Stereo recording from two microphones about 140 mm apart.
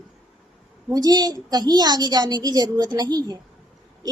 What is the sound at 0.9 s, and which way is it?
A woman's voice, 30° right (ahead or behind).